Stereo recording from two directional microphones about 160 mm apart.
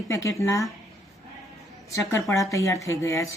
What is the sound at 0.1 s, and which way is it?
Speech, 20° left (ahead or behind).